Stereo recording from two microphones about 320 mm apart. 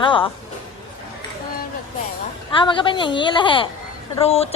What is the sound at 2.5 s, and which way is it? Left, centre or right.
A woman's voice, centre.